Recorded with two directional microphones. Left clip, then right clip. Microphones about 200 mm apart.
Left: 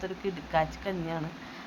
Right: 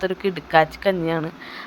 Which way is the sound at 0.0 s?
30° right (ahead or behind).